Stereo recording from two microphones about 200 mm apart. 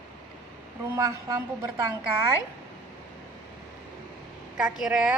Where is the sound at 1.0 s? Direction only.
15° right (ahead or behind).